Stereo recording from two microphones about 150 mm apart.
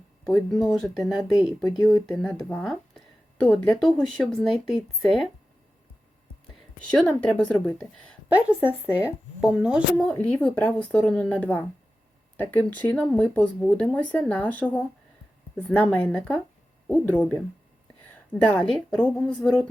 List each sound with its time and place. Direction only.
0.3 s speech: centre (ahead or behind)
6.5 s speech: 5° left (ahead or behind)
8.3 s speech: 10° right (ahead or behind)
10.0 s speech: 5° left (ahead or behind)